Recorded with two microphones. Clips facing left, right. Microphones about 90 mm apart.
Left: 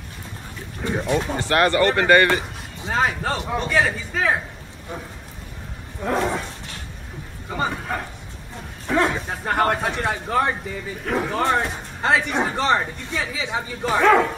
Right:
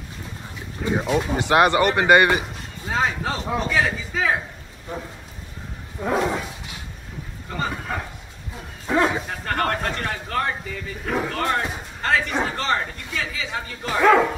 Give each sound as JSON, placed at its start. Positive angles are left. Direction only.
{"t": 1.0, "sound": "speech", "side_deg": -10}
{"t": 2.9, "sound": "speech", "side_deg": 0}
{"t": 5.9, "sound": "speech", "side_deg": -5}
{"t": 7.4, "sound": "speech", "side_deg": 5}
{"t": 8.8, "sound": "bow-wow", "side_deg": -15}
{"t": 9.3, "sound": "speech", "side_deg": 15}
{"t": 14.0, "sound": "speech", "side_deg": -5}